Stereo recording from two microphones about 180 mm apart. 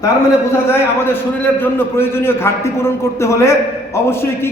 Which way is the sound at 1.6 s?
10° left (ahead or behind).